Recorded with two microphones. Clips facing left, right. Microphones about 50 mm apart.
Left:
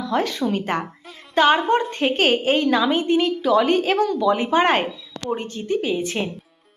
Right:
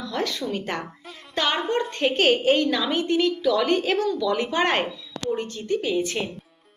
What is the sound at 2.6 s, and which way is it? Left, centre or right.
Speech, left.